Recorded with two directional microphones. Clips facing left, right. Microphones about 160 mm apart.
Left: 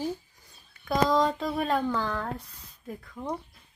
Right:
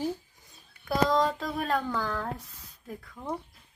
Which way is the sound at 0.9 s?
Centre (ahead or behind).